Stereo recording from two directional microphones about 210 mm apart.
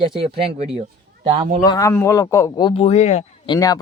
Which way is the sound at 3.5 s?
15° left (ahead or behind).